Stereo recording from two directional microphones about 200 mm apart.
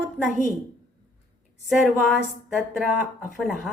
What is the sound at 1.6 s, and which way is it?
A woman's voice, 5° right (ahead or behind).